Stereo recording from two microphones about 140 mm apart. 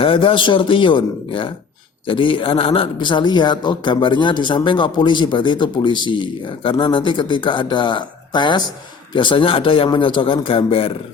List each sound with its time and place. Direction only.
0.0 s speech: 40° left (ahead or behind)